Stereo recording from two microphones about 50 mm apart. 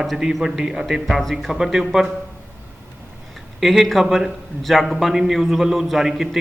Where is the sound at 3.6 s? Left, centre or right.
Centre.